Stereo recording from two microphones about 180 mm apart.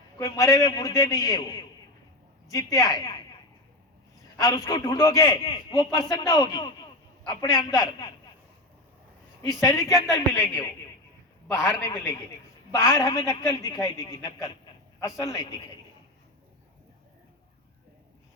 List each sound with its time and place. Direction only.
0.2 s a man's voice: 20° left (ahead or behind)
4.4 s speech: 15° left (ahead or behind)
5.4 s a man's voice: 30° left (ahead or behind)
9.4 s a man's voice: 20° left (ahead or behind)
12.9 s speech: 15° left (ahead or behind)